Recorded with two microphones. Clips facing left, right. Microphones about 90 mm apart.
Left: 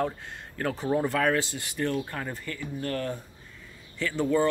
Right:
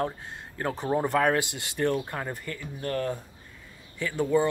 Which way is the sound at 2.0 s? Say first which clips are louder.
Right 1 dB; 15° right (ahead or behind).